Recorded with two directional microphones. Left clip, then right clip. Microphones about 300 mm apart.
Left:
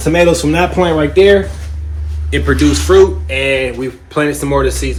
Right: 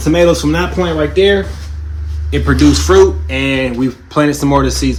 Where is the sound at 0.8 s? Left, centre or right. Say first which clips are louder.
Left 2 dB; centre.